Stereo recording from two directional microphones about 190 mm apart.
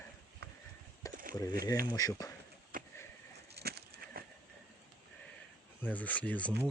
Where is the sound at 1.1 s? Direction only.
45° right (ahead or behind).